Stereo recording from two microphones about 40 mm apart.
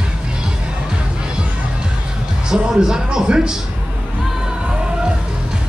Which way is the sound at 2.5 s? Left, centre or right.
Centre.